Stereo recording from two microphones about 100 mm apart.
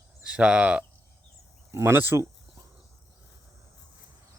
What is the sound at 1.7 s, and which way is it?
Speech, 25° right (ahead or behind).